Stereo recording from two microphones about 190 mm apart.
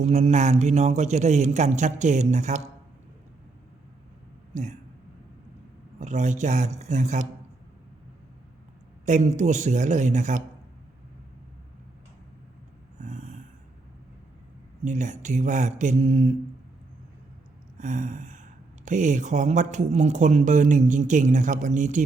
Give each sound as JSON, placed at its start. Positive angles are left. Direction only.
{"t": 0.0, "sound": "speech", "side_deg": -35}
{"t": 4.5, "sound": "speech", "side_deg": -40}
{"t": 6.0, "sound": "speech", "side_deg": -40}
{"t": 9.0, "sound": "speech", "side_deg": -40}
{"t": 13.0, "sound": "a sound", "side_deg": -40}
{"t": 14.8, "sound": "speech", "side_deg": -40}
{"t": 17.7, "sound": "speech", "side_deg": -40}